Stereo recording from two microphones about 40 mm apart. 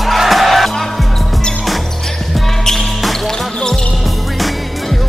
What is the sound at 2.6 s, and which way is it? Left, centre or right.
Music, centre.